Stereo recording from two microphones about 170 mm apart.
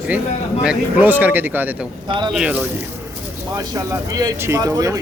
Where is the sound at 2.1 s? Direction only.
25° right (ahead or behind).